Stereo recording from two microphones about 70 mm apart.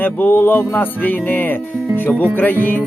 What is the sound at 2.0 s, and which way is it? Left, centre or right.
Music, left.